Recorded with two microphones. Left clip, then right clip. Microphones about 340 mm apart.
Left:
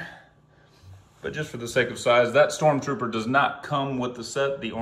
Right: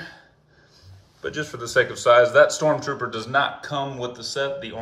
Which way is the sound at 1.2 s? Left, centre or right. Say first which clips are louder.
Right 3 dB; left.